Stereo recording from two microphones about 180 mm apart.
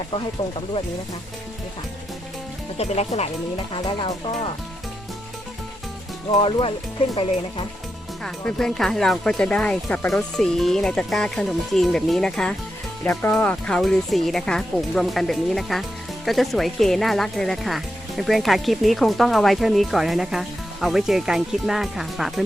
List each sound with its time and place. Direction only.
2.7 s speech: 35° left (ahead or behind)
6.4 s speech: 30° left (ahead or behind)
8.2 s speech: 5° left (ahead or behind)